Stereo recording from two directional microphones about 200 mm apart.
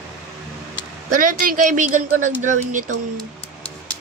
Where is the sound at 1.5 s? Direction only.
40° right (ahead or behind).